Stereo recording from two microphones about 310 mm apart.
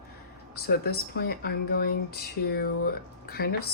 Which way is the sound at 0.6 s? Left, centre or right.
Left.